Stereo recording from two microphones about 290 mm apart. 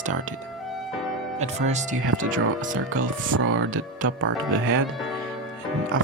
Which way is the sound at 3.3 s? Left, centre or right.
Right.